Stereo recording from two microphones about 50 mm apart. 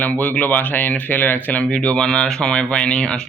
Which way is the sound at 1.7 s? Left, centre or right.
Centre.